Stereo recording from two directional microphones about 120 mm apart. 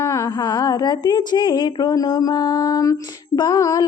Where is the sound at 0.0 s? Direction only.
25° left (ahead or behind).